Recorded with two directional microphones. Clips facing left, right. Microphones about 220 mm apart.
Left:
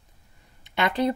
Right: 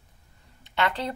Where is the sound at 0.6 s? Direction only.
15° left (ahead or behind).